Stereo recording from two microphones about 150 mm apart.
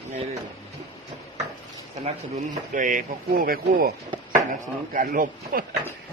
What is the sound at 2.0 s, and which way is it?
Speech, 60° right (ahead or behind).